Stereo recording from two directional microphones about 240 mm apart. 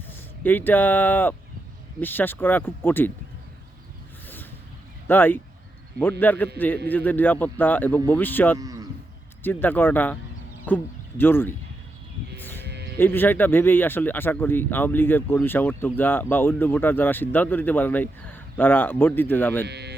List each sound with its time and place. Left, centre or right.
0.4 s speech: centre
5.0 s speech: centre
8.5 s livestock: centre
9.4 s speech: centre
12.4 s sheep: centre
12.6 s sheep: right
13.0 s speech: centre
19.6 s speech: right